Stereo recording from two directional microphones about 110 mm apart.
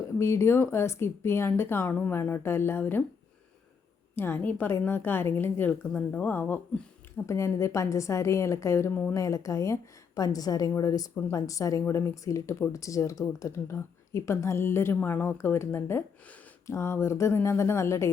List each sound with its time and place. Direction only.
0.2 s speech: 25° left (ahead or behind)
4.1 s a woman's voice: 20° left (ahead or behind)
7.3 s a woman's voice: 25° left (ahead or behind)